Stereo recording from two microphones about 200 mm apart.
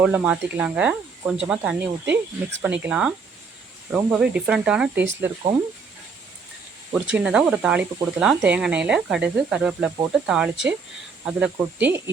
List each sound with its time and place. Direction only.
0.0 s speech: 5° right (ahead or behind)
6.9 s speech: 5° right (ahead or behind)